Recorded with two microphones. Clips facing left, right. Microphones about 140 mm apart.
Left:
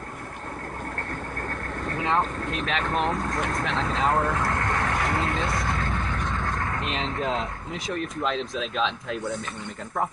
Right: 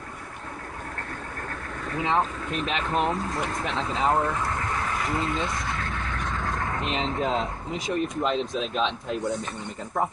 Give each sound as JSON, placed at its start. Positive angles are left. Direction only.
{"t": 1.9, "sound": "speech", "side_deg": 0}
{"t": 4.6, "sound": "vehicle", "side_deg": 0}
{"t": 6.2, "sound": "speech", "side_deg": 0}